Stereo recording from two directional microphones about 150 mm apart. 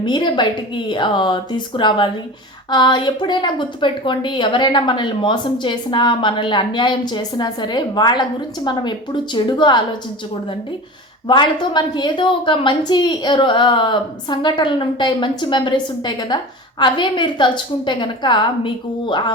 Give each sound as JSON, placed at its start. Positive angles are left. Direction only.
{"t": 0.0, "sound": "a woman's voice", "side_deg": 30}
{"t": 11.3, "sound": "a woman's voice", "side_deg": 30}